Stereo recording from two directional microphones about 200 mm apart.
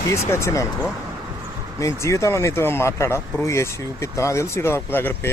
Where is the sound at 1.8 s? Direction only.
15° left (ahead or behind).